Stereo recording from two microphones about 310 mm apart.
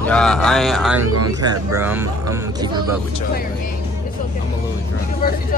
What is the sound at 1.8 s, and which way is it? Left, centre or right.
Speech, centre.